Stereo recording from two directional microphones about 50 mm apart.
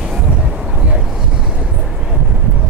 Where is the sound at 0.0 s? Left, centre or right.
Centre.